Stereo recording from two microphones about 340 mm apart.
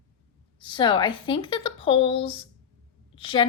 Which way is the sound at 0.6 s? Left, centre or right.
Centre.